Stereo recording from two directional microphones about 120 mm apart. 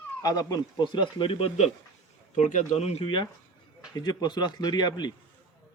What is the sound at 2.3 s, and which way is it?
Speech, 90° left.